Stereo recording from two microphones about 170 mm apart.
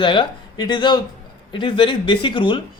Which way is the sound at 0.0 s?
30° left (ahead or behind).